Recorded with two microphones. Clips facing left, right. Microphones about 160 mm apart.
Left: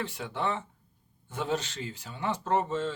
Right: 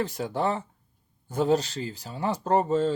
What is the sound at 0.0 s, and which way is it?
Speech, 40° right (ahead or behind).